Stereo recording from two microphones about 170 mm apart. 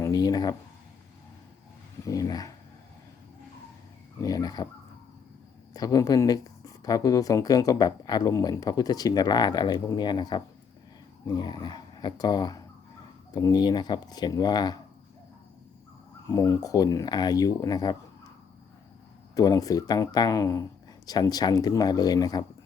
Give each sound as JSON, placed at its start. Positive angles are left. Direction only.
{"t": 0.0, "sound": "speech", "side_deg": 25}
{"t": 2.0, "sound": "speech", "side_deg": 20}
{"t": 4.2, "sound": "speech", "side_deg": 20}
{"t": 5.7, "sound": "speech", "side_deg": 20}
{"t": 16.2, "sound": "speech", "side_deg": 20}
{"t": 19.3, "sound": "speech", "side_deg": 20}